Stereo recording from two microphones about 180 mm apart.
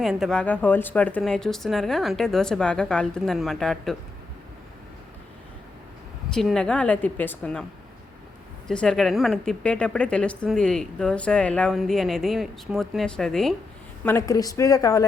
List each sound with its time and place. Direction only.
0.0 s speech: centre (ahead or behind)
6.3 s a woman's voice: 5° left (ahead or behind)
8.6 s speech: 5° left (ahead or behind)
14.0 s a woman's voice: 15° left (ahead or behind)